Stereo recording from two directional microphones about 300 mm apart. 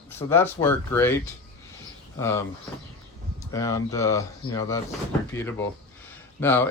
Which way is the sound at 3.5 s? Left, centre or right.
Centre.